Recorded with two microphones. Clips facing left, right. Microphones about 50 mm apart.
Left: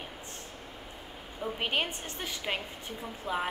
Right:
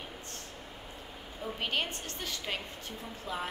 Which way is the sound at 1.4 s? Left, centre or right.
Centre.